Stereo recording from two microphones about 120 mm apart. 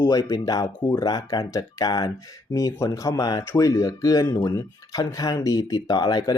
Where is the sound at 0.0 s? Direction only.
30° left (ahead or behind).